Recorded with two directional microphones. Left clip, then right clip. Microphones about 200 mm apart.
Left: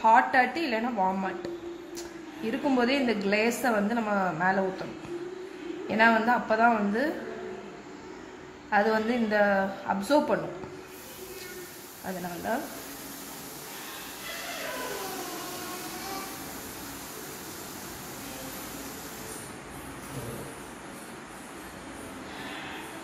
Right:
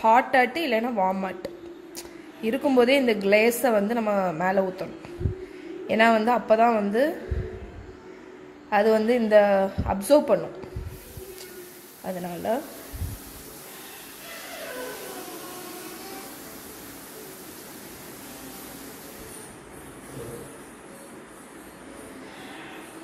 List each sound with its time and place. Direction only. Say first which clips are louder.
0.0 s a woman's voice: right 2 dB; 35° right (ahead or behind)
5.9 s a woman's voice: right 3 dB; 30° right (ahead or behind)
8.6 s a woman's voice: right 4 dB; 30° right (ahead or behind)